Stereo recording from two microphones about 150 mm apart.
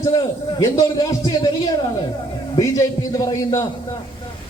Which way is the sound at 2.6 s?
25° left (ahead or behind).